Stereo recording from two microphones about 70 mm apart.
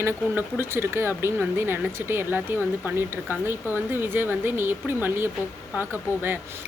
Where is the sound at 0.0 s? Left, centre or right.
Right.